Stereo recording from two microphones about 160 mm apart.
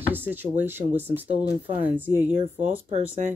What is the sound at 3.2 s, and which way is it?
Speech, 55° right (ahead or behind).